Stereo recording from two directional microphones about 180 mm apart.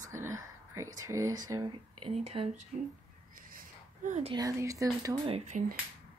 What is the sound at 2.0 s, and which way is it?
Speech, 30° right (ahead or behind).